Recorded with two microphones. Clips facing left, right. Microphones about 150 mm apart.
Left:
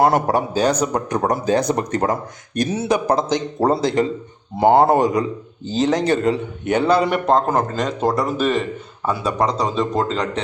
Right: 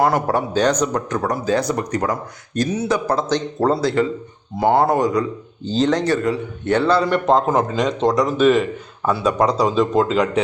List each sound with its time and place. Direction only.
0.0 s a man's voice: 20° left (ahead or behind)
1.1 s a man's voice: 20° left (ahead or behind)
5.7 s a man's voice: 10° left (ahead or behind)
6.1 s speech: 25° left (ahead or behind)
6.7 s a man's voice: 15° left (ahead or behind)
7.3 s speech: centre (ahead or behind)